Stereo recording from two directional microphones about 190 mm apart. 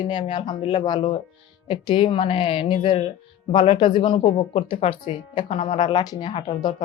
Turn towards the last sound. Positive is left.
turn(degrees=25)  # may be behind; listen again after turning